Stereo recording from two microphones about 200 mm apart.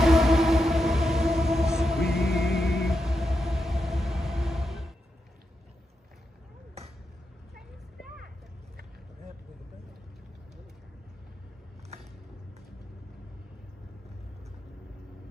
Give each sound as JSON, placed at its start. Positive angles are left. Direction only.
{"t": 0.0, "sound": "music", "side_deg": 0}